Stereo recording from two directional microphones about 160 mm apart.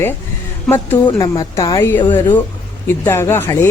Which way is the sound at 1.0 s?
20° left (ahead or behind).